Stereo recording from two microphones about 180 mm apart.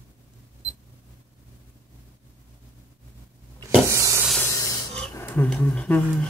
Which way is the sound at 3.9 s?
15° right (ahead or behind).